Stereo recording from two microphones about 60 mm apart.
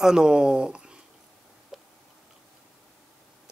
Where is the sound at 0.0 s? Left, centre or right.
Centre.